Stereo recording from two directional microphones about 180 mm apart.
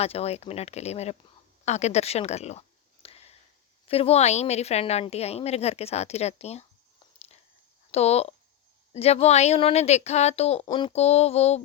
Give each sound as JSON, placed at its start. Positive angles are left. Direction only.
{"t": 0.0, "sound": "a woman's voice", "side_deg": 35}
{"t": 1.6, "sound": "a sound", "side_deg": 40}
{"t": 3.8, "sound": "a woman's voice", "side_deg": 35}
{"t": 7.9, "sound": "a woman's voice", "side_deg": 35}